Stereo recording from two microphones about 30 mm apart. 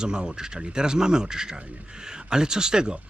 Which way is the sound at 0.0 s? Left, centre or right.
Right.